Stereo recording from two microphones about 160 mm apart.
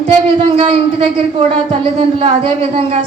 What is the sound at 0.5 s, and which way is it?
A woman's voice, 35° right (ahead or behind).